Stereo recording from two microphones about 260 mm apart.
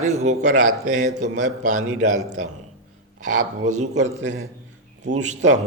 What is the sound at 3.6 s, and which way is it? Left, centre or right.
Speech, right.